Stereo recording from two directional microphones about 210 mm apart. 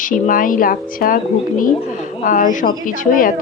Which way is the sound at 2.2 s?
40° left (ahead or behind).